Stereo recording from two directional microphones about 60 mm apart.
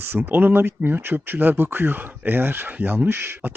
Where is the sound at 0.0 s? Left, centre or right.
Right.